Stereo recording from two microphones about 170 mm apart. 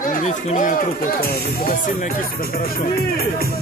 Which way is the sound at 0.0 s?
50° left (ahead or behind).